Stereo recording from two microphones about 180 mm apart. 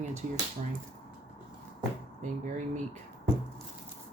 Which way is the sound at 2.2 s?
40° right (ahead or behind).